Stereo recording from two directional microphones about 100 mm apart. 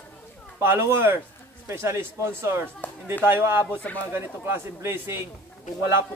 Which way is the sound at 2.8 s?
15° left (ahead or behind).